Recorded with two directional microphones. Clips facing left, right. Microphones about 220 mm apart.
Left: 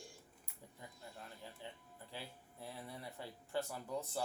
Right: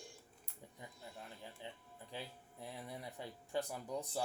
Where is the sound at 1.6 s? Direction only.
15° right (ahead or behind).